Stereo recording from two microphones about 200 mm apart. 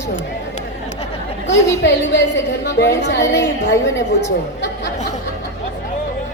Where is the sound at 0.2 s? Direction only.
40° left (ahead or behind).